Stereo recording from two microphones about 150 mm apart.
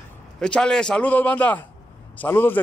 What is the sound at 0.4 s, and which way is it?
A man's voice, 5° left (ahead or behind).